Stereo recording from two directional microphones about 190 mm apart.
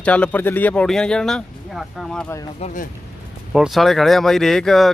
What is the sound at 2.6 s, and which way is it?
Speech, 45° left (ahead or behind).